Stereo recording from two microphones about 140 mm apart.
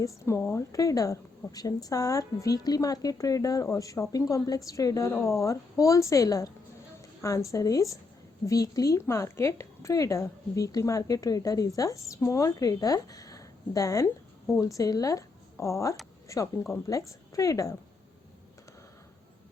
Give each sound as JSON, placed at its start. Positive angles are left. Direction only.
{"t": 0.3, "sound": "a woman's voice", "side_deg": 20}